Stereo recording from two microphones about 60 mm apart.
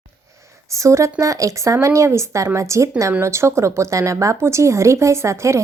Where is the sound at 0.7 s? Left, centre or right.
Right.